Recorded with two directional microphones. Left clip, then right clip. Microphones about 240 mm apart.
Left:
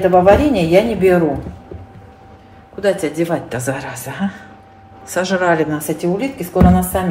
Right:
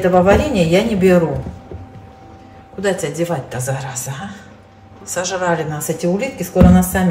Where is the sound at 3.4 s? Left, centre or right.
Left.